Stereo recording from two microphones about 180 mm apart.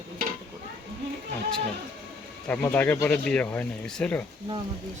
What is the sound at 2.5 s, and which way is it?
Speech, 10° left (ahead or behind).